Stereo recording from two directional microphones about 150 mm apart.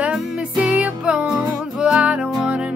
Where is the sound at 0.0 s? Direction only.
5° right (ahead or behind).